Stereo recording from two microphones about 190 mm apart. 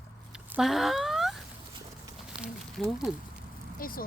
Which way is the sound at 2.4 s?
Centre (ahead or behind).